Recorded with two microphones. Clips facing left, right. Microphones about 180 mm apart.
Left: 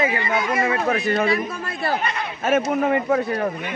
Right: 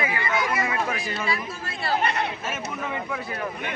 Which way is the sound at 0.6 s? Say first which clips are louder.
Left 6 dB; 40° left (ahead or behind).